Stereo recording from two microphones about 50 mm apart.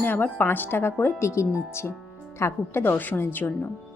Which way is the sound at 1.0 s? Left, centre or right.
Left.